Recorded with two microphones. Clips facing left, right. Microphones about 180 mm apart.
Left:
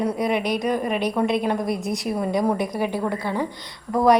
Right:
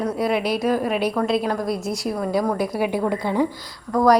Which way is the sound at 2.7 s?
10° right (ahead or behind).